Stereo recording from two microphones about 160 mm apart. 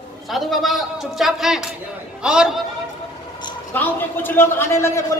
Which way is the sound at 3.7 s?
10° left (ahead or behind).